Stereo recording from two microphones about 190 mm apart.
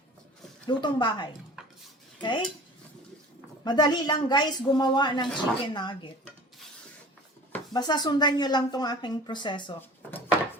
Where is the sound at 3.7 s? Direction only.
20° left (ahead or behind).